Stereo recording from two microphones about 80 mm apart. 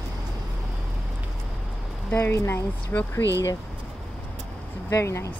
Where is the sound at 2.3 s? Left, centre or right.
Left.